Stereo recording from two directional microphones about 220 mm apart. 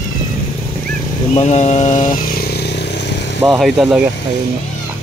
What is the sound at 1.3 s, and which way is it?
Motorcycle, 30° left (ahead or behind).